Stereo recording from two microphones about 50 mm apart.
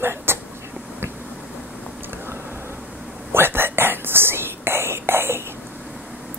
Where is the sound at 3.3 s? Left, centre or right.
Right.